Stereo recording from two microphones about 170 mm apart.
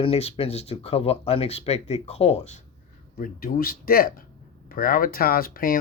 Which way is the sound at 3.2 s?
60° left (ahead or behind).